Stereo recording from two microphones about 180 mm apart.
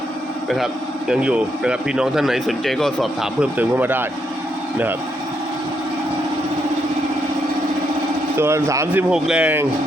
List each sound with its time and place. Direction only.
0.5 s speech: 5° right (ahead or behind)
8.4 s a man's voice: 15° right (ahead or behind)
9.0 s speech: 5° right (ahead or behind)